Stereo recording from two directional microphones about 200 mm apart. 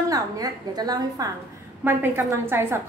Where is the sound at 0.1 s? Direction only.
20° right (ahead or behind).